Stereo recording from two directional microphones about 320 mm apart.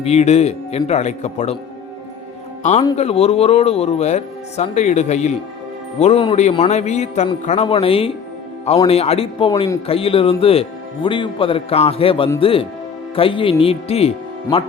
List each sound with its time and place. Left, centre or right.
0.0 s speech: centre
2.6 s a man's voice: left